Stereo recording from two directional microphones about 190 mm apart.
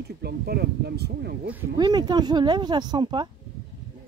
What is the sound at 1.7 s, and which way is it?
Speech, 20° right (ahead or behind).